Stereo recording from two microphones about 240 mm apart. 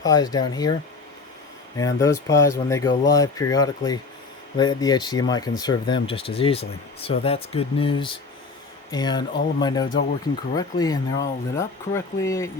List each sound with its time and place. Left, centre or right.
0.0 s speech: centre
1.8 s speech: centre